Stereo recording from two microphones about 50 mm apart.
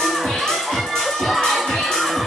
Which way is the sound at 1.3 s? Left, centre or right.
Centre.